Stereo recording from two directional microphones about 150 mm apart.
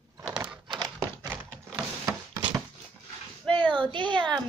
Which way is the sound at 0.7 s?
25° right (ahead or behind).